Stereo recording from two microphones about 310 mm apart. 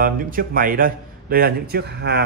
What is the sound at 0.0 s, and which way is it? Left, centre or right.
Speech, right.